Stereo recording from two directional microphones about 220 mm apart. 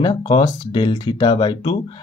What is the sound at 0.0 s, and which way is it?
Speech, 20° left (ahead or behind).